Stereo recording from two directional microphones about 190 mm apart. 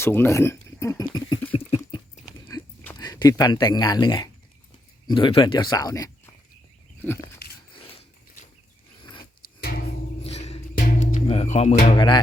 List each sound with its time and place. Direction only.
0.0 s speech: 10° left (ahead or behind)
1.5 s dog: 30° left (ahead or behind)
2.5 s a sound: 20° left (ahead or behind)
5.0 s speech: 25° left (ahead or behind)
10.2 s music: 35° left (ahead or behind)
10.8 s music: 45° left (ahead or behind)
11.9 s music: 25° left (ahead or behind)